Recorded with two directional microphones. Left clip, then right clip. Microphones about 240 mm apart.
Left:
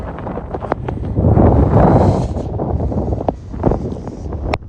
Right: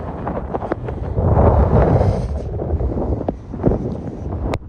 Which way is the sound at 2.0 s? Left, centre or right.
Centre.